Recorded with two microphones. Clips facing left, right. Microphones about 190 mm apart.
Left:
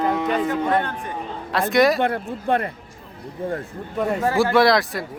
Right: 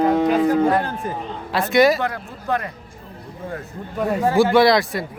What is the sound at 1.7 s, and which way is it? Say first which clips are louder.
Speech: right 2 dB; centre (ahead or behind).